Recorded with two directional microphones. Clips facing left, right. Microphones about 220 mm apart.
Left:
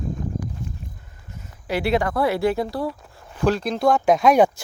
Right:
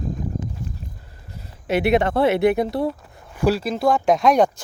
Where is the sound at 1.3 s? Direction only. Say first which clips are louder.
Right 4 dB; 35° right (ahead or behind).